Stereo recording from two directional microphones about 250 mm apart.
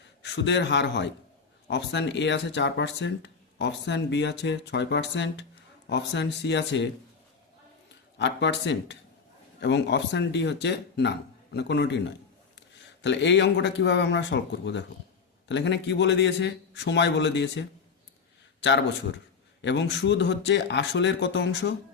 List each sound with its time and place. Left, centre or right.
0.2 s a man's voice: left
8.2 s speech: left
13.0 s speech: left